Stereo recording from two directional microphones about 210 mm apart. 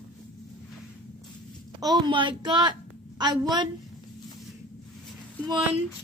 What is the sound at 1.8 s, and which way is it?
Speech, 20° right (ahead or behind).